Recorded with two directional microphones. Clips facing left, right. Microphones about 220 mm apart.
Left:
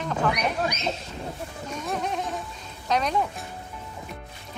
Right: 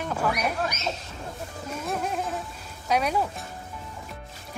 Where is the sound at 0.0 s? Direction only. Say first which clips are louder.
Left 1 dB; 5° right (ahead or behind).